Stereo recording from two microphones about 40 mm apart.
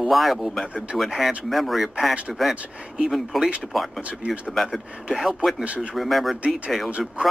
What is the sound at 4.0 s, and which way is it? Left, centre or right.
Speech, right.